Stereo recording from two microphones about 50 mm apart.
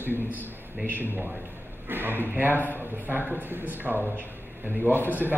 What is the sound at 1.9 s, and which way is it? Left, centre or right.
A man's voice, right.